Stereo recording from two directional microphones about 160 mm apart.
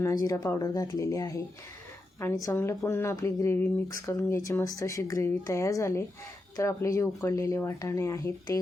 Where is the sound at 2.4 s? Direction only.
15° left (ahead or behind).